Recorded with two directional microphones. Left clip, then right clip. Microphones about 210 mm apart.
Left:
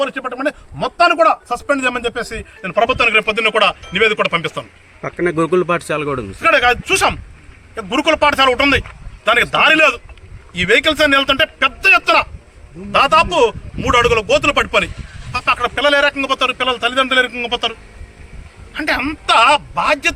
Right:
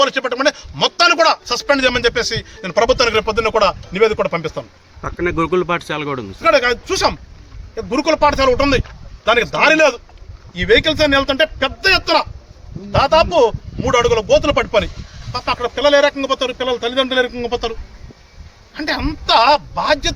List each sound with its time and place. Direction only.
0.0 s speech: 10° right (ahead or behind)
5.0 s speech: 15° left (ahead or behind)
6.4 s a man's voice: 5° right (ahead or behind)